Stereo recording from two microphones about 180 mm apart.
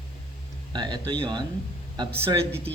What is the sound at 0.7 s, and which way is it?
A man's voice, 25° right (ahead or behind).